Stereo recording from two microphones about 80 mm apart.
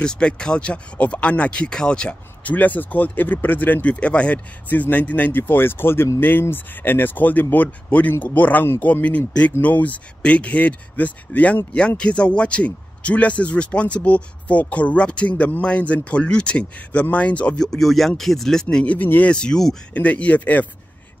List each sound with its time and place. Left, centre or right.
0.0 s speech: centre
17.6 s speech: centre; by 19.3 s left
19.3 s speech: centre
19.9 s speech: centre